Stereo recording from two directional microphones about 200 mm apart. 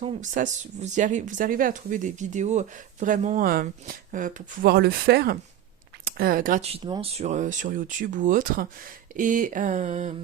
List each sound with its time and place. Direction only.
0.0 s speech: 40° right (ahead or behind)